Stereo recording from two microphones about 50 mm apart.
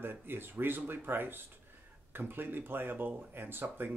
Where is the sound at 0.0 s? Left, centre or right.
Right.